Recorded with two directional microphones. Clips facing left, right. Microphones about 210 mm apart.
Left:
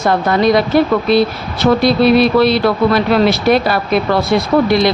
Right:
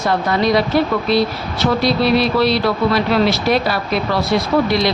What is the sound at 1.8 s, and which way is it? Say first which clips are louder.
Speech: left 5 dB; 55° left (ahead or behind).